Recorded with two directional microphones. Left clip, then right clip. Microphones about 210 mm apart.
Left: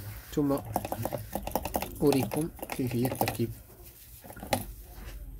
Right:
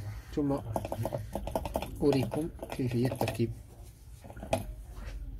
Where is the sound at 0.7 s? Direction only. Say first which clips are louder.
Left 2 dB; 45° left (ahead or behind).